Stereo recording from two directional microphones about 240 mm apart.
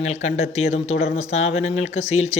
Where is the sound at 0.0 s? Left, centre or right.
Left.